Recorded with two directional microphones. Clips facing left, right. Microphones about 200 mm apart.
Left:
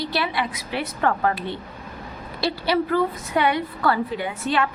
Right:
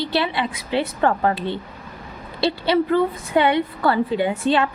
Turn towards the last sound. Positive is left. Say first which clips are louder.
# right 5 dB
turn(degrees=-30)  # may be behind; listen again after turning